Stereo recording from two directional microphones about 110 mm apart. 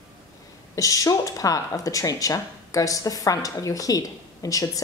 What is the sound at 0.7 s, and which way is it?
Speech, 30° left (ahead or behind).